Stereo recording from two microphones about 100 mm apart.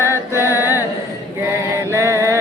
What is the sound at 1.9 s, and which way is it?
Mantra, 30° right (ahead or behind).